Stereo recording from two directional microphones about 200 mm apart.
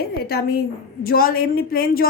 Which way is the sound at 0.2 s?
50° left (ahead or behind).